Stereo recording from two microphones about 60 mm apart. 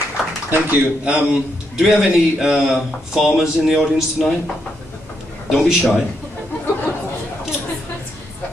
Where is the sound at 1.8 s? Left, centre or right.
Centre.